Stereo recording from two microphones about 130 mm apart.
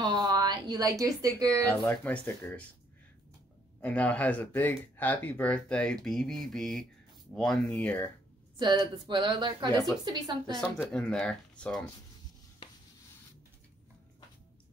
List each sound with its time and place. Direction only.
0.0 s a sound: 35° right (ahead or behind)
1.9 s speech: 10° left (ahead or behind)
3.8 s speech: 10° left (ahead or behind)
8.5 s speech: 35° right (ahead or behind)
10.9 s speech: 5° left (ahead or behind)